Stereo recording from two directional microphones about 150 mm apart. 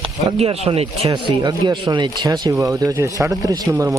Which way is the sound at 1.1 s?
30° right (ahead or behind).